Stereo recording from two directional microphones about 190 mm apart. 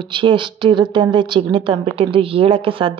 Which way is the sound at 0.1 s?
25° right (ahead or behind).